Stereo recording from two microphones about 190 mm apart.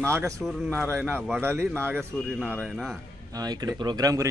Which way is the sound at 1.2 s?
5° left (ahead or behind).